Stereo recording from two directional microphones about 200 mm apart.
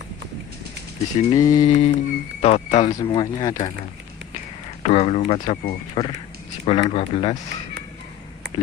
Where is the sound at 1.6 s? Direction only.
30° left (ahead or behind).